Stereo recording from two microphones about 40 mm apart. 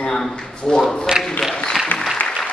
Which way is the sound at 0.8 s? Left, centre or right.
Centre.